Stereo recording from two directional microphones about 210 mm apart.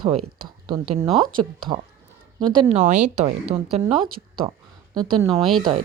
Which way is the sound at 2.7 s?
35° right (ahead or behind).